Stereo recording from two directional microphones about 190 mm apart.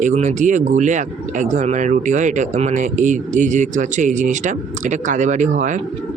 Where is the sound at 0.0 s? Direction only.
40° right (ahead or behind).